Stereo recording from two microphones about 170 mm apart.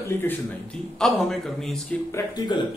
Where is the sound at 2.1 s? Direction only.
20° left (ahead or behind).